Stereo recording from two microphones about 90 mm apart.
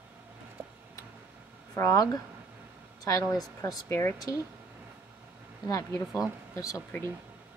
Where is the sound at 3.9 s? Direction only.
30° left (ahead or behind).